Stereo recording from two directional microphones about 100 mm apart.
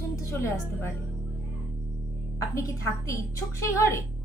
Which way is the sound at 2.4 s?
30° left (ahead or behind).